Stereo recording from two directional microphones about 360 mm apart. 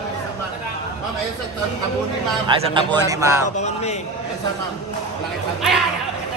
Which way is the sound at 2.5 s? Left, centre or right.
Centre.